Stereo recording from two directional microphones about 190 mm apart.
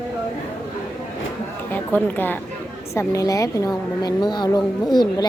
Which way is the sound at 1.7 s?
10° left (ahead or behind).